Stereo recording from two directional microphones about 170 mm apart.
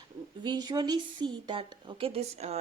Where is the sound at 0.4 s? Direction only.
25° right (ahead or behind).